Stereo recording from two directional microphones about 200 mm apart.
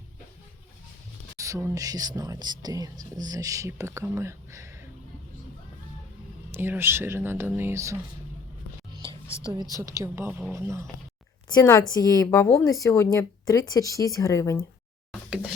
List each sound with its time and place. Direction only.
1.4 s speech: 15° right (ahead or behind)
6.5 s speech: 10° right (ahead or behind)
9.4 s speech: 20° right (ahead or behind)
11.4 s speech: 20° left (ahead or behind)